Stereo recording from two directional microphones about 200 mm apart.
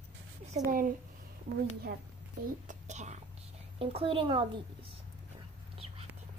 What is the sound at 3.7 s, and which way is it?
Speech, 30° right (ahead or behind).